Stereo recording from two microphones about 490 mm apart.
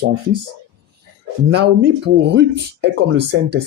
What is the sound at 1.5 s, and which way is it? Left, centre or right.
Speech, centre.